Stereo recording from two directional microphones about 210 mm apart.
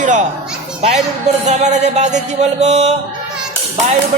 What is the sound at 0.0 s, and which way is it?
Children playing, 35° right (ahead or behind).